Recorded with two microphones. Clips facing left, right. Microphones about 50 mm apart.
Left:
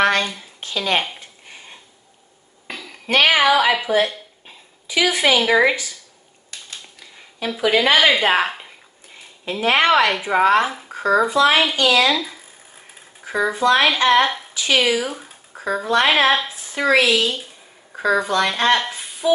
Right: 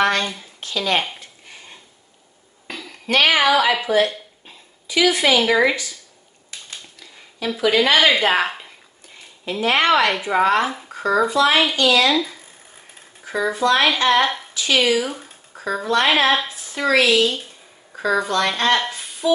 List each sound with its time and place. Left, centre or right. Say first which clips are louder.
0.6 s speech: even; left
2.7 s a sound: even; centre
3.1 s a woman's voice: left 1 dB; left
4.8 s a woman's voice: right 1 dB; centre
7.0 s a sound: even; centre
7.6 s a woman's voice: even; centre
11.7 s speech: even; left
12.0 s speech: even; centre
13.2 s a woman's voice: left 1 dB; centre
14.2 s speech: even; centre
14.5 s speech: left 1 dB; centre
14.8 s a woman's voice: right 2 dB; centre
16.4 s a sound: left 1 dB; centre
16.9 s a woman's voice: right 1 dB; centre